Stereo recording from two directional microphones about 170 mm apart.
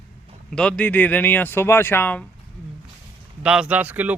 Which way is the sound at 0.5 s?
5° left (ahead or behind).